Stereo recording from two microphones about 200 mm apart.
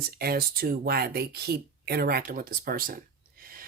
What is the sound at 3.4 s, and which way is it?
Gasp, 45° right (ahead or behind).